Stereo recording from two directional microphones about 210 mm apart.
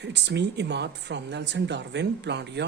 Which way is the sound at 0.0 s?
55° right (ahead or behind).